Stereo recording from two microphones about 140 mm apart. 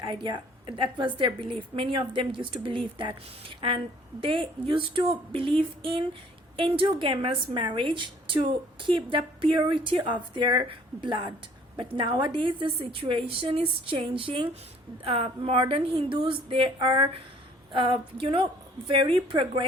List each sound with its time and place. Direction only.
0.1 s a woman's voice: 40° right (ahead or behind)
4.2 s a woman's voice: 40° right (ahead or behind)